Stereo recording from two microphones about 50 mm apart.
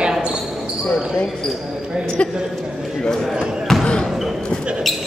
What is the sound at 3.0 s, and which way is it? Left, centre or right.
Speech, centre.